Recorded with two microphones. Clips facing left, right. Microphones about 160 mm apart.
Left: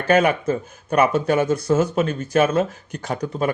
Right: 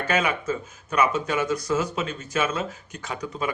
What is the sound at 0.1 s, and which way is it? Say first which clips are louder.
Speech: left 9 dB; 55° left (ahead or behind).